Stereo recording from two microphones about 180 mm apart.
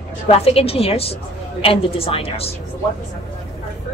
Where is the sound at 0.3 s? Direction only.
35° left (ahead or behind).